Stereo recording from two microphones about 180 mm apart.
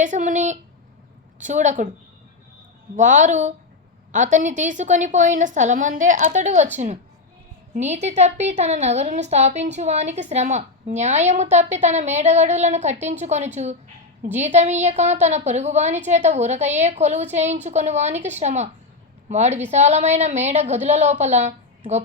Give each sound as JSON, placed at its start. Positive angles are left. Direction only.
{"t": 0.0, "sound": "a woman's voice", "side_deg": -45}
{"t": 2.9, "sound": "a woman's voice", "side_deg": -45}